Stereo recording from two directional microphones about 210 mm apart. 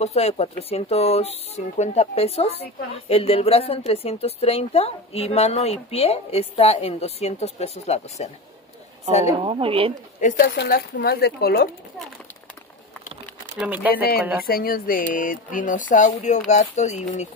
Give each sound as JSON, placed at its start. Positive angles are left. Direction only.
{"t": 0.0, "sound": "speech", "side_deg": 30}
{"t": 9.4, "sound": "speech", "side_deg": -25}
{"t": 10.5, "sound": "speech", "side_deg": 55}
{"t": 13.6, "sound": "speech", "side_deg": -5}
{"t": 14.4, "sound": "speech", "side_deg": 45}